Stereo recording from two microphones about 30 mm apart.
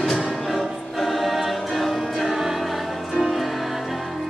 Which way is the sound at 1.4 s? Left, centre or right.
Centre.